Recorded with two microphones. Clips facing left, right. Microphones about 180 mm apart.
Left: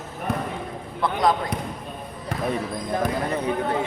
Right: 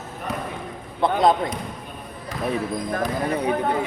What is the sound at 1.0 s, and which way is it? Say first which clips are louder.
Speech: right 4 dB; 25° right (ahead or behind).